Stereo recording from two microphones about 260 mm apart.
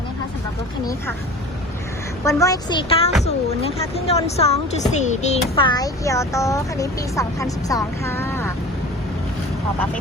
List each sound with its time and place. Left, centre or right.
2.2 s speech: centre